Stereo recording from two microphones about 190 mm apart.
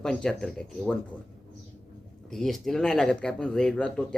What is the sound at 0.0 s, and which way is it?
Speech, 5° left (ahead or behind).